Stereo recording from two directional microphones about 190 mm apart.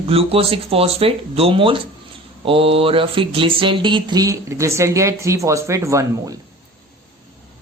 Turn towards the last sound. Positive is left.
turn(degrees=-15)  # may be behind; listen again after turning